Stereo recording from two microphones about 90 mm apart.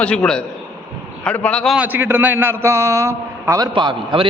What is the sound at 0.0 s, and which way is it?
A man's voice, 10° left (ahead or behind).